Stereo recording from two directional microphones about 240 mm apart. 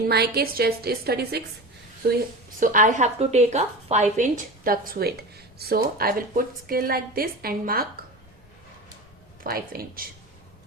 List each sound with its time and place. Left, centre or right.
0.1 s a woman's voice: right
2.6 s a woman's voice: right
9.4 s a woman's voice: right